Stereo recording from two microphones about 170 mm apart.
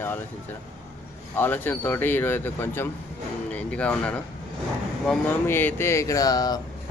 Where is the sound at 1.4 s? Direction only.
10° left (ahead or behind).